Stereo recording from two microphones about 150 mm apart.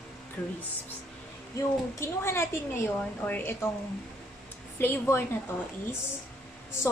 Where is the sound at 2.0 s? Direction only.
15° left (ahead or behind).